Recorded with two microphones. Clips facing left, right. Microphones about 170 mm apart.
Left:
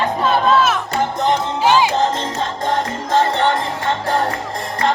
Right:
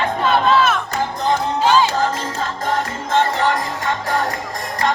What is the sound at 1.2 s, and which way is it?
Music, 20° left (ahead or behind).